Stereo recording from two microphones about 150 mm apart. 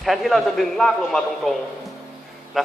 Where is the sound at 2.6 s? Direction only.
Centre (ahead or behind).